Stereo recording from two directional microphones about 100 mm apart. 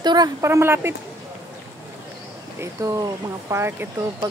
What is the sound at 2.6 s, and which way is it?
Speech, 30° right (ahead or behind).